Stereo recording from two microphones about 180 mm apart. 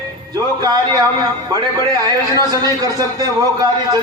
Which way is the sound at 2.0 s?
20° right (ahead or behind).